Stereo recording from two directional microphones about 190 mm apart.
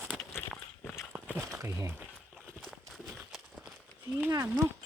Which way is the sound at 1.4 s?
15° right (ahead or behind).